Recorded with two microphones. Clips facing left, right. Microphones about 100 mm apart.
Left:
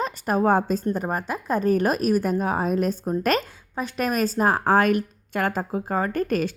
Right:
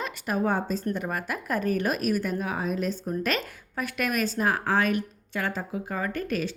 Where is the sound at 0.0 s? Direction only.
40° left (ahead or behind).